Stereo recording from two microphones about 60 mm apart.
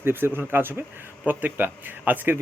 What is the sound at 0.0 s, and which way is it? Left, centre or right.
A man's voice, right.